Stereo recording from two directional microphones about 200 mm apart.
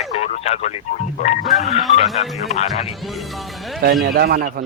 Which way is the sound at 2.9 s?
Centre (ahead or behind).